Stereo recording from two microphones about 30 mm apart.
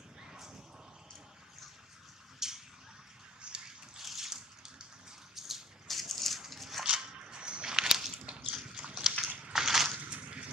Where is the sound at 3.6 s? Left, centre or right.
Centre.